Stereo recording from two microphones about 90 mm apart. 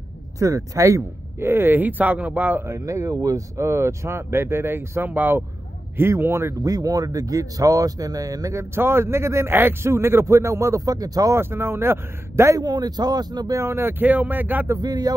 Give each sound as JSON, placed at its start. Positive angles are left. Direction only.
{"t": 0.4, "sound": "speech", "side_deg": -35}
{"t": 2.7, "sound": "speech", "side_deg": -35}
{"t": 6.6, "sound": "speech", "side_deg": -40}
{"t": 8.7, "sound": "speech", "side_deg": -30}
{"t": 11.3, "sound": "speech", "side_deg": -25}
{"t": 12.6, "sound": "speech", "side_deg": -50}
{"t": 13.6, "sound": "speech", "side_deg": -30}
{"t": 14.8, "sound": "speech", "side_deg": -45}